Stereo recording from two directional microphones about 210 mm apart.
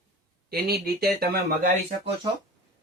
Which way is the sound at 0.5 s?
50° right (ahead or behind).